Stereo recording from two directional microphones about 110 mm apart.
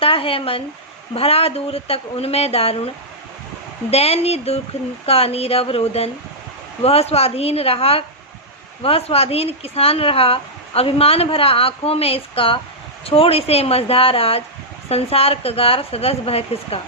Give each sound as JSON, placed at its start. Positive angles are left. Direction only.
{"t": 0.0, "sound": "speech", "side_deg": 55}
{"t": 3.9, "sound": "speech", "side_deg": 65}